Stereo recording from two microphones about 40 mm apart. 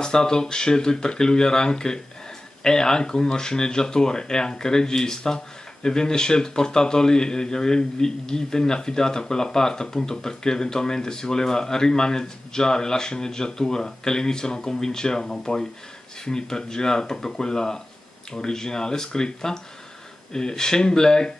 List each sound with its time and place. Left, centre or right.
0.0 s speech: centre